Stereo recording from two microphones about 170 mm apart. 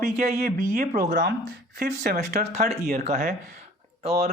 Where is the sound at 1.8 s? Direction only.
65° right (ahead or behind).